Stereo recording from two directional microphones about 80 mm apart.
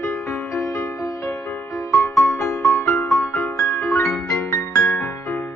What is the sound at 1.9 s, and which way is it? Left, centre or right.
Music, left.